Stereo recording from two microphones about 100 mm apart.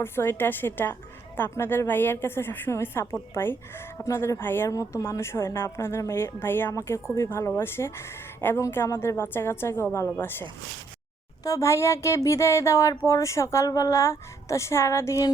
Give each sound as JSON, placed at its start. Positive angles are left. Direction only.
{"t": 0.0, "sound": "a woman's voice", "side_deg": 25}
{"t": 11.4, "sound": "a woman's voice", "side_deg": 30}